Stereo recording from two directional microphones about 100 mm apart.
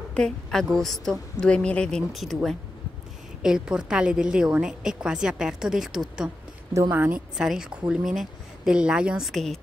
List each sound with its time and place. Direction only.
0.1 s a woman's voice: 5° left (ahead or behind)
6.7 s speech: 30° right (ahead or behind)
7.3 s speech: 5° right (ahead or behind)